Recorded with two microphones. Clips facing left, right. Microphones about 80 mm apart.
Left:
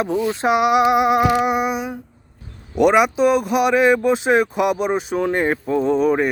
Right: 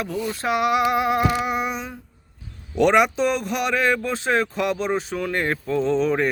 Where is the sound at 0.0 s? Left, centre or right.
Left.